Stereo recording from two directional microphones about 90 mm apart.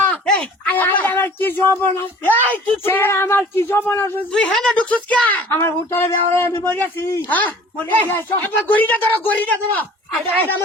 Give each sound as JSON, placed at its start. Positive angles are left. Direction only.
{"t": 0.1, "sound": "speech", "side_deg": 15}
{"t": 4.3, "sound": "a woman's voice", "side_deg": 10}
{"t": 5.5, "sound": "speech", "side_deg": 25}